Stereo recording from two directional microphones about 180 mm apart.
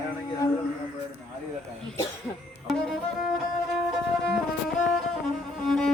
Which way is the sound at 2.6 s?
Centre (ahead or behind).